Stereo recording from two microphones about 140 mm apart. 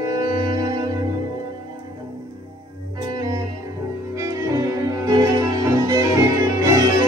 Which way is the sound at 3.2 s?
25° right (ahead or behind).